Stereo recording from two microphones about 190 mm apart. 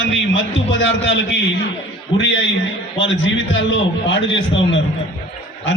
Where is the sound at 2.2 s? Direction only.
70° left (ahead or behind).